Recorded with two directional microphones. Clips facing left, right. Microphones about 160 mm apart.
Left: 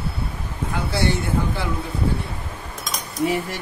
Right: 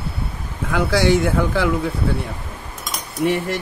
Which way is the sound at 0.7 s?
90° right.